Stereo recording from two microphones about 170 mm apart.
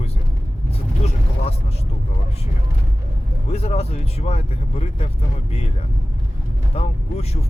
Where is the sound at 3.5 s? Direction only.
35° left (ahead or behind).